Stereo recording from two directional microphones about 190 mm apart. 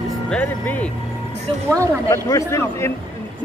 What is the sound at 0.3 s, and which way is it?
Speech, 10° left (ahead or behind).